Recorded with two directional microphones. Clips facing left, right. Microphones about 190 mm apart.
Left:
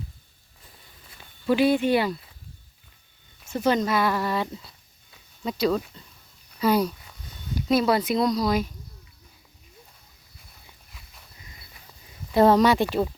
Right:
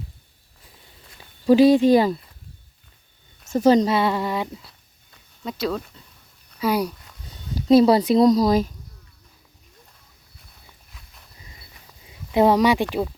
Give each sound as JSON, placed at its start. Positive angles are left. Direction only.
{"t": 1.5, "sound": "speech", "side_deg": -35}
{"t": 3.5, "sound": "speech", "side_deg": -40}
{"t": 5.1, "sound": "speech", "side_deg": 0}
{"t": 6.6, "sound": "speech", "side_deg": -10}
{"t": 7.5, "sound": "speech", "side_deg": -35}
{"t": 12.3, "sound": "speech", "side_deg": -15}